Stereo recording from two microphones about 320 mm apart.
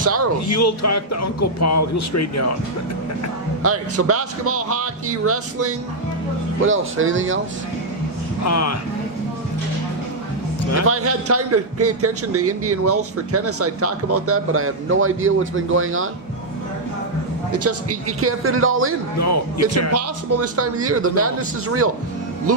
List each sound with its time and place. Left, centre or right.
0.0 s speech: right
0.5 s speech: left
3.6 s a man's voice: right
8.4 s speech: left
10.8 s a man's voice: right
17.5 s a man's voice: right
19.2 s speech: left
19.9 s a man's voice: right